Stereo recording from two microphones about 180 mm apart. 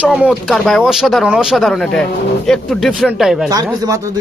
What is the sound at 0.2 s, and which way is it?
Speech, centre (ahead or behind).